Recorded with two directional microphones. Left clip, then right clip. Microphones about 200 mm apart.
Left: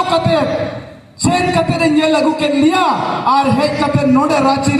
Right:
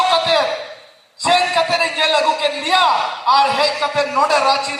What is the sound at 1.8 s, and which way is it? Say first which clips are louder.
A man's voice: left 3 dB; 50° left (ahead or behind).